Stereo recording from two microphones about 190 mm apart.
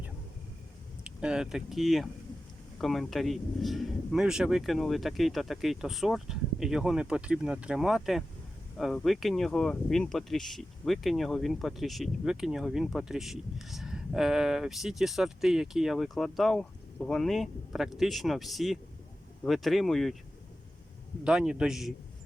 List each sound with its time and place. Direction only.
1.0 s speech: 5° right (ahead or behind)
21.2 s speech: 5° right (ahead or behind)